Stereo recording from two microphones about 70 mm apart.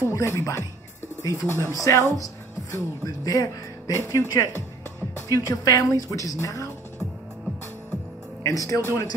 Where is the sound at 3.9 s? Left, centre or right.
Left.